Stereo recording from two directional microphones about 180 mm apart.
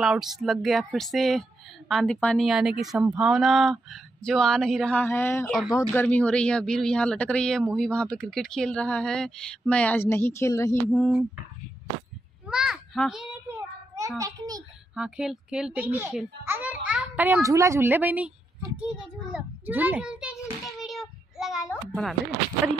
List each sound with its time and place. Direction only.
0.0 s a woman's voice: centre (ahead or behind); by 10.8 s 15° left (ahead or behind)
12.4 s a child's voice: 5° right (ahead or behind)
13.9 s a child's voice: 20° right (ahead or behind)
15.0 s a child's voice: 5° right (ahead or behind)
19.3 s child singing: 10° right (ahead or behind)